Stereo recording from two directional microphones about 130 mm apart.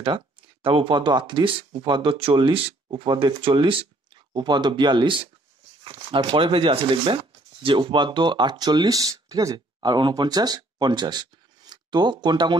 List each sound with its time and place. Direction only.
0.0 s speech: 40° right (ahead or behind)